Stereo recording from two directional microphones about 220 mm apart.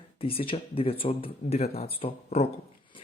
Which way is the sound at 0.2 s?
25° left (ahead or behind).